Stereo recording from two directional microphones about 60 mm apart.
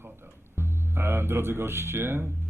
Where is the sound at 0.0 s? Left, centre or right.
Right.